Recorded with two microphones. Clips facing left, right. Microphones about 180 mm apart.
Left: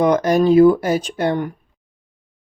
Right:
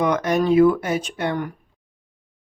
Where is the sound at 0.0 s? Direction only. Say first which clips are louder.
Left 5 dB; 35° left (ahead or behind).